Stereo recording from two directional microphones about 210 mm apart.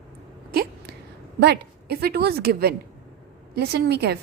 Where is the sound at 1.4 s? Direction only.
50° right (ahead or behind).